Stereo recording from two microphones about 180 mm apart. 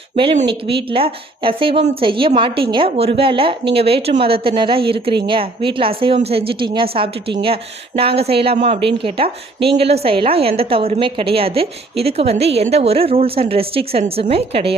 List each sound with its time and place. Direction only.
0.4 s a woman's voice: 30° right (ahead or behind)